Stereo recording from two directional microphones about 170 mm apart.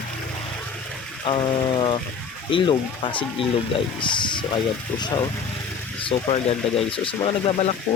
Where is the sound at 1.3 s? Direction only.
30° left (ahead or behind).